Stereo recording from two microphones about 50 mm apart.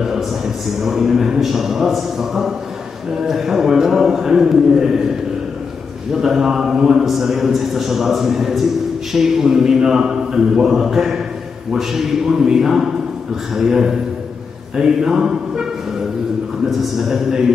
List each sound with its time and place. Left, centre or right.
0.7 s a man's voice: centre
6.1 s a man's voice: centre
16.8 s speech: centre